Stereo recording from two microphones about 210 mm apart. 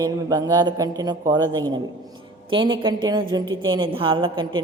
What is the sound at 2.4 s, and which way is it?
A woman's voice, 25° right (ahead or behind).